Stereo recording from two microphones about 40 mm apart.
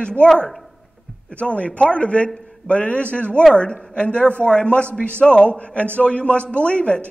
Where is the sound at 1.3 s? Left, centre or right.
Left.